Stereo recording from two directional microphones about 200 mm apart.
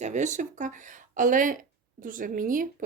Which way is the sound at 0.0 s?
35° right (ahead or behind).